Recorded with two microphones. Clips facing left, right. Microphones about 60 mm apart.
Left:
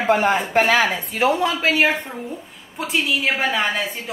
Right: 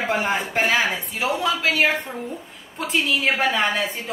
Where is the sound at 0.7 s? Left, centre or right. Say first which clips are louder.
Left 3 dB; left.